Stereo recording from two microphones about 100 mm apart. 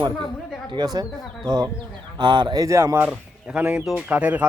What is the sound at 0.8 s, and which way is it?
Speech, 40° right (ahead or behind).